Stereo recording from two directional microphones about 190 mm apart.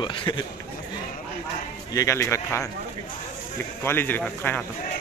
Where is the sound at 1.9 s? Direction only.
15° left (ahead or behind).